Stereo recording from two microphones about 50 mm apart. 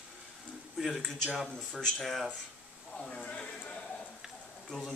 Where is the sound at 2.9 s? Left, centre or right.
Centre.